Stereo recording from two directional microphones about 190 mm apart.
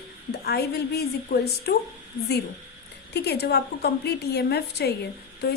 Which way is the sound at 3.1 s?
60° left (ahead or behind).